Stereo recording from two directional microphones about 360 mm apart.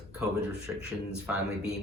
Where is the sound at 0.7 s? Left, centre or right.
Centre.